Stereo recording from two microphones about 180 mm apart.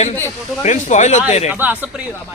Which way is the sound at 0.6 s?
40° left (ahead or behind).